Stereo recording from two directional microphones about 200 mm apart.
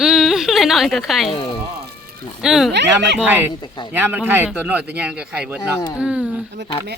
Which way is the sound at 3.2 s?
10° right (ahead or behind).